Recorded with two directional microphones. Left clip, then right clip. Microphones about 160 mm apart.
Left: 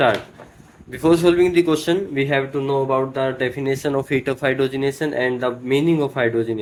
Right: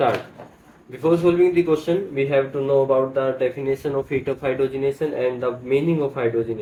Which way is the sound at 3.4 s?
80° left.